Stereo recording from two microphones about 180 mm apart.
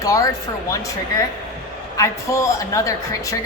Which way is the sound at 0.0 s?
20° left (ahead or behind).